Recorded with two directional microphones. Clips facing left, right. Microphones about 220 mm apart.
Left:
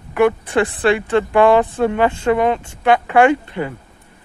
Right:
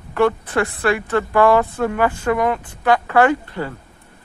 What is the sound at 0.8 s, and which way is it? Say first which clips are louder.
Speech: left 3 dB; 25° left (ahead or behind).